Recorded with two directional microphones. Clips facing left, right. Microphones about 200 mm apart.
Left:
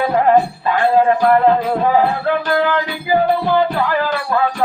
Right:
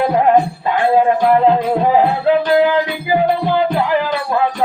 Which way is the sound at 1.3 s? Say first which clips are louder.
Right 1 dB; 15° right (ahead or behind).